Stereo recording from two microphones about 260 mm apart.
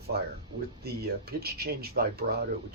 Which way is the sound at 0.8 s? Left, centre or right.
Right.